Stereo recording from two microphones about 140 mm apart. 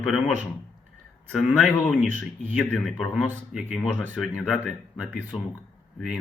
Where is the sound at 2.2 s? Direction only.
10° left (ahead or behind).